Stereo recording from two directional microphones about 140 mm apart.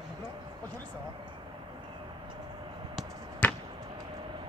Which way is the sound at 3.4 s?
10° left (ahead or behind).